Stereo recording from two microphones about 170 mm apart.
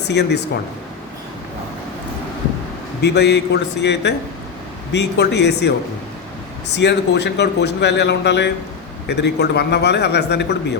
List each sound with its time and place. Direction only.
0.1 s a man's voice: 85° left
3.0 s a man's voice: 85° left
6.7 s a man's voice: 90° left